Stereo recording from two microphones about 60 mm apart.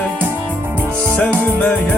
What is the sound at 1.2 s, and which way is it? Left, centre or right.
Music, left.